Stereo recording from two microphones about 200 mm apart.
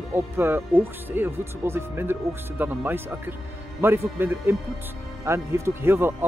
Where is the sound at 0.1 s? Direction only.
10° right (ahead or behind).